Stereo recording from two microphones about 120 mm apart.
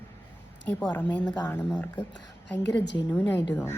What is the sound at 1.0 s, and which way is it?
Speech, 10° left (ahead or behind).